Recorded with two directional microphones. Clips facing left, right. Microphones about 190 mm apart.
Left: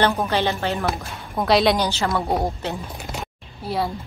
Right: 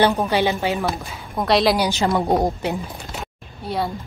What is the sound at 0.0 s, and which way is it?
Speech, 10° right (ahead or behind).